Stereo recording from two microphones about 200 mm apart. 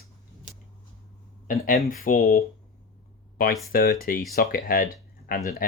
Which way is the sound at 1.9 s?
45° left (ahead or behind).